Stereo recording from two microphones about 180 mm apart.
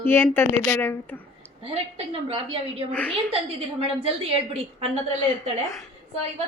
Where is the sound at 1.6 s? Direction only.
35° right (ahead or behind).